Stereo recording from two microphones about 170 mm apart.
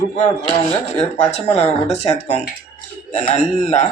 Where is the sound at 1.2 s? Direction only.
40° left (ahead or behind).